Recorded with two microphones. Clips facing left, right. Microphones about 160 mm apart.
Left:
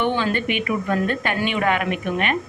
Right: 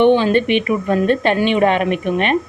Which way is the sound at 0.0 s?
20° right (ahead or behind).